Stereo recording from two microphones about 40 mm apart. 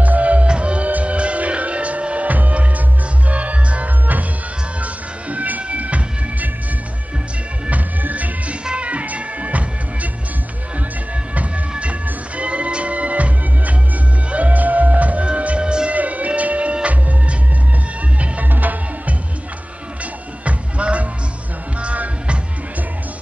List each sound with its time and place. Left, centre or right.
0.0 s music: right
7.7 s music: right
11.8 s music: right
15.9 s music: right
18.5 s music: right
20.4 s music: right